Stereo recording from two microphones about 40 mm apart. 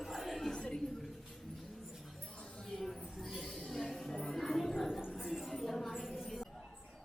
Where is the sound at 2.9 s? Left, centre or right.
Centre.